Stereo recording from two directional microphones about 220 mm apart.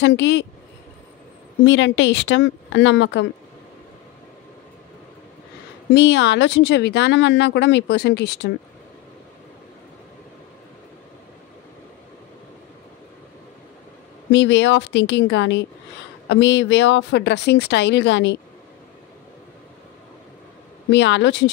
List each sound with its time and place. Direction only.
0.0 s speech: 55° left (ahead or behind)
1.6 s a woman's voice: 55° left (ahead or behind)
5.9 s speech: 55° left (ahead or behind)
14.3 s a woman's voice: 55° left (ahead or behind)
20.9 s speech: 55° left (ahead or behind)